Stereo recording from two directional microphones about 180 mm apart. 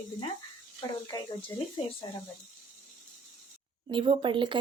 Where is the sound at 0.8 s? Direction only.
20° left (ahead or behind).